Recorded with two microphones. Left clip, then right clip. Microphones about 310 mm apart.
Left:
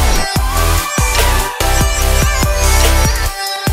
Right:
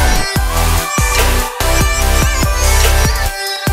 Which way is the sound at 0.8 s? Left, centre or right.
Centre.